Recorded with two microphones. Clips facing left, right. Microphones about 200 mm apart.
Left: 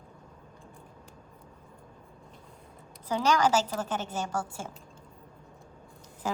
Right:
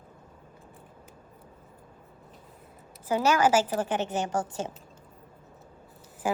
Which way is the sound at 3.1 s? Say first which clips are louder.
Right 2 dB; 10° right (ahead or behind).